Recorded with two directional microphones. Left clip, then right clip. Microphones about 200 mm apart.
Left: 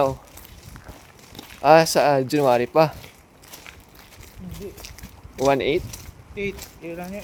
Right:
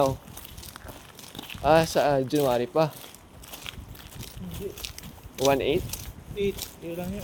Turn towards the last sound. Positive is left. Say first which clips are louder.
# left 1 dB
turn(degrees=10)  # may be behind; listen again after turning